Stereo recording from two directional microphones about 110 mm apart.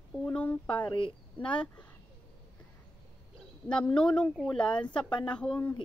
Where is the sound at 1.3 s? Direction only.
10° left (ahead or behind).